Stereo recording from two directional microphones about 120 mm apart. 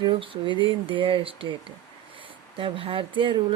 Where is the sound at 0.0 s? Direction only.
45° right (ahead or behind).